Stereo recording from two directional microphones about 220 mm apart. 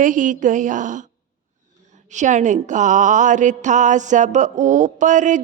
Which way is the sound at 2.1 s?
35° right (ahead or behind).